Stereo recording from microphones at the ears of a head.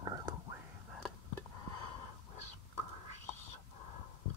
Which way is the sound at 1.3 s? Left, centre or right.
Left.